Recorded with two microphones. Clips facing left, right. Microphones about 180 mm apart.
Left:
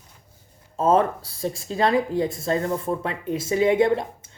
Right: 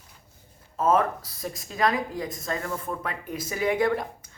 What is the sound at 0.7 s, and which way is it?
Speech, 30° left (ahead or behind).